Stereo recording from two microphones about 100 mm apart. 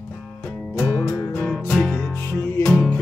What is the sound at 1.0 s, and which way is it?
Music, 30° left (ahead or behind).